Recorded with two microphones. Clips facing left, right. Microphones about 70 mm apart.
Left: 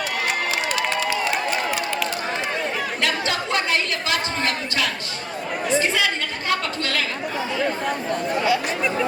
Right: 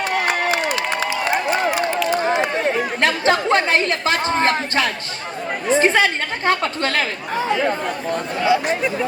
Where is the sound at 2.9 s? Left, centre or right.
Right.